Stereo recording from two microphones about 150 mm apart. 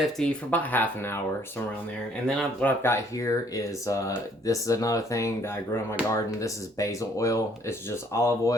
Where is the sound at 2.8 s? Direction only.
20° left (ahead or behind).